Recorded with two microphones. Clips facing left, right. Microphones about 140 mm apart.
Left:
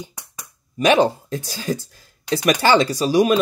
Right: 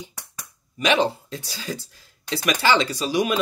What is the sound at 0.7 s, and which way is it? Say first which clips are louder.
Speech: left 5 dB; 45° left (ahead or behind).